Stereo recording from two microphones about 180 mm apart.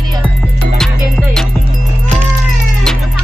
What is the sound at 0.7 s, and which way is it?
Music, 5° left (ahead or behind).